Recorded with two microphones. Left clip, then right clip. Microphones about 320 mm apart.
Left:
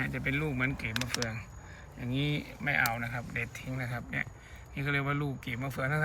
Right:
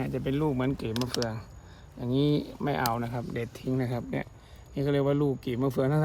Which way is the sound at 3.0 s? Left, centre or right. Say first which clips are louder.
Right 2 dB; right.